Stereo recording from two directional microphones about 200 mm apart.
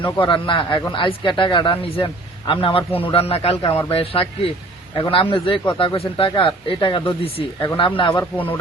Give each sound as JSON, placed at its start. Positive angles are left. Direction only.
{"t": 0.0, "sound": "speech", "side_deg": 25}
{"t": 8.2, "sound": "speech", "side_deg": 10}